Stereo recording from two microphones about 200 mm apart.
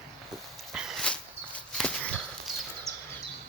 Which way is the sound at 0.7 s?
Centre (ahead or behind).